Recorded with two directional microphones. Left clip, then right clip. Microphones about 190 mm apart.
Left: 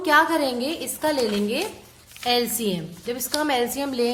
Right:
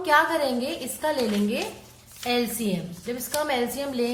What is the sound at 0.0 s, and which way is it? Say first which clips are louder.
A woman's voice: left 2 dB; 30° left (ahead or behind).